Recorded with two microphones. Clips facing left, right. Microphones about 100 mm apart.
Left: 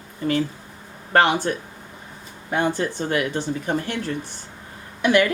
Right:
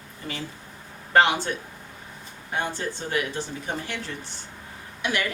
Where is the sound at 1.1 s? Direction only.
50° left (ahead or behind).